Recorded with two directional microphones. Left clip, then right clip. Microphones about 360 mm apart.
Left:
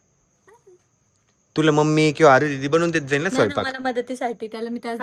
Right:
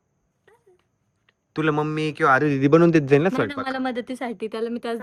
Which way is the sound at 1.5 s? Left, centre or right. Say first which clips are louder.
Left 5 dB; centre.